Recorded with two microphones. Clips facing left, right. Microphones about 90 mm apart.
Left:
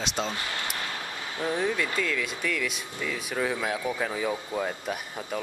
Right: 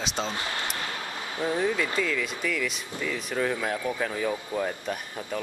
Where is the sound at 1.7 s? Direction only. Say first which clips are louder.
Right 1 dB; centre (ahead or behind).